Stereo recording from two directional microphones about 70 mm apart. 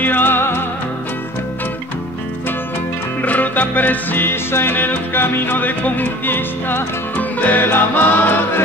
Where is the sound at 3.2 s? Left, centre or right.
Left.